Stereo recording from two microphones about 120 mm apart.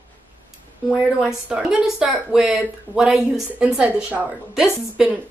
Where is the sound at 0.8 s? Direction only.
10° right (ahead or behind).